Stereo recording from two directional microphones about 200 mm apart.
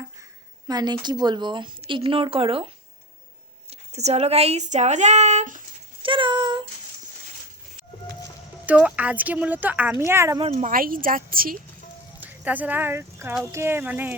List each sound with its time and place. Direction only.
0.7 s a woman's voice: 20° right (ahead or behind); by 5.6 s 35° right (ahead or behind)
6.0 s a sound: 25° right (ahead or behind)
8.6 s a woman's voice: 5° right (ahead or behind)
10.4 s speech: 35° right (ahead or behind)
12.2 s a woman's voice: 10° right (ahead or behind)